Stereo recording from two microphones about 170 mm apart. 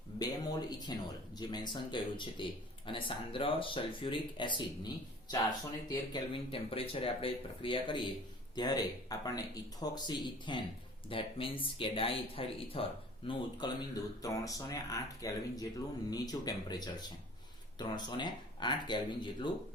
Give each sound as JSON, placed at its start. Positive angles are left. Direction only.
{"t": 0.2, "sound": "speech", "side_deg": 25}
{"t": 5.9, "sound": "speech", "side_deg": 30}